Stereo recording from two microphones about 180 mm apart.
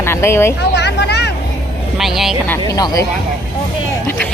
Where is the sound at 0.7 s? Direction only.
70° left (ahead or behind).